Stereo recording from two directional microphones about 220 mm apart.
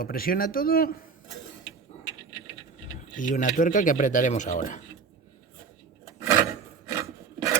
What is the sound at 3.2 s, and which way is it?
Speech, 35° left (ahead or behind).